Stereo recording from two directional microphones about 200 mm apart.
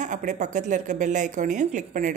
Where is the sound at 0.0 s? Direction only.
35° right (ahead or behind).